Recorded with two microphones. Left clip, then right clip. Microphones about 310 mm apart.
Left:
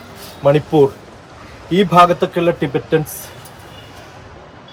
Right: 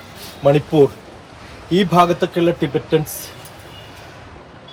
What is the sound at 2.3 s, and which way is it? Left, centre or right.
Speech, centre.